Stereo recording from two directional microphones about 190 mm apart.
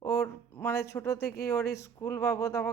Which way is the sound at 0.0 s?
15° left (ahead or behind).